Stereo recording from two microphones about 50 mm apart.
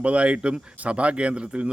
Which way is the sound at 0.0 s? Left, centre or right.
Right.